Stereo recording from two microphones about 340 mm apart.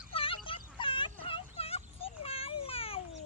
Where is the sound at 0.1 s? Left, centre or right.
Centre.